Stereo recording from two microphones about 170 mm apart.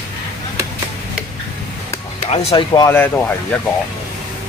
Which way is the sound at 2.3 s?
35° left (ahead or behind).